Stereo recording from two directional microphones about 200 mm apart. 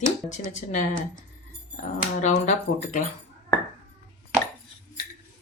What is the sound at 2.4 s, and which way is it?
Speech, 35° left (ahead or behind).